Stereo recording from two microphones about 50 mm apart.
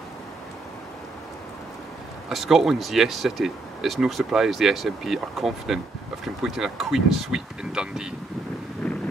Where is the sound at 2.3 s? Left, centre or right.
Centre.